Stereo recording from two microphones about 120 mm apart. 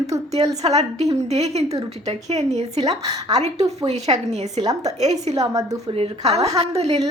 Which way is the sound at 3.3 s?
65° right (ahead or behind).